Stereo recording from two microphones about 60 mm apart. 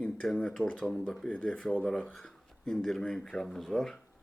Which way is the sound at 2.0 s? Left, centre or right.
Centre.